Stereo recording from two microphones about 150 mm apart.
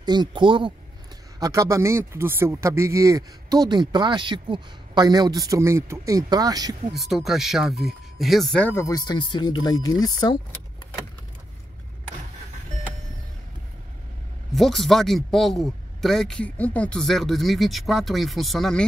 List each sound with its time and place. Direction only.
0.0 s speech: 30° right (ahead or behind)
1.4 s speech: 20° right (ahead or behind)
6.9 s speech: centre (ahead or behind); by 10.3 s 25° left (ahead or behind)
14.5 s a man's voice: centre (ahead or behind)